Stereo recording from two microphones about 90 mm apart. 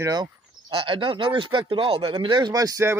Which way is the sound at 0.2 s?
65° right (ahead or behind).